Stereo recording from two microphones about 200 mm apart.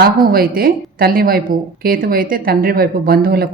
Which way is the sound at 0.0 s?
45° right (ahead or behind).